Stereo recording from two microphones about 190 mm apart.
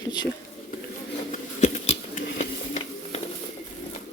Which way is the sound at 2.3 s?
40° left (ahead or behind).